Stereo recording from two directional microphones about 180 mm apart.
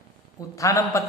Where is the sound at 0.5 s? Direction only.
15° left (ahead or behind).